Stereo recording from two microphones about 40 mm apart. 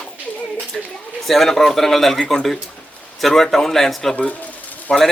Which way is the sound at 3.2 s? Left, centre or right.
Centre.